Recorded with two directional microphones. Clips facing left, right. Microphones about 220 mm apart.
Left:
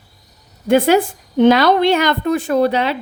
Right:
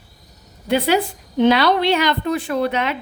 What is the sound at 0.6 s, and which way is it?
A woman's voice, 50° left (ahead or behind).